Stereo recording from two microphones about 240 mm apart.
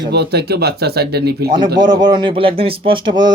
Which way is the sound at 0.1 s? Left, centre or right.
Right.